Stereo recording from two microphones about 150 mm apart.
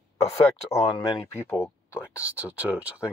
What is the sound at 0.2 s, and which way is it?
Speech, 20° left (ahead or behind).